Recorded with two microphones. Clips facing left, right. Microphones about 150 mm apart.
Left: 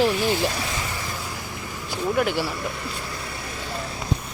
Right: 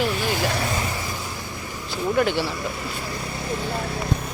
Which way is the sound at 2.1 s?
5° left (ahead or behind).